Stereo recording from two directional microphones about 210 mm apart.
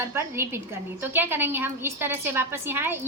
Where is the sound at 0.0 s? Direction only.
10° right (ahead or behind).